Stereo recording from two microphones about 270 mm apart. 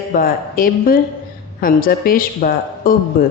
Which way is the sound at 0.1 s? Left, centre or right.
Left.